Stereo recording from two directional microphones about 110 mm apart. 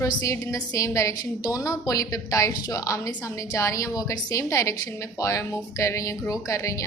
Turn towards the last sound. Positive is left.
turn(degrees=30)  # may be behind; listen again after turning